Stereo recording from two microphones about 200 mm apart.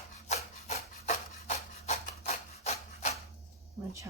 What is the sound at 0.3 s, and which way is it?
Rub, 35° left (ahead or behind).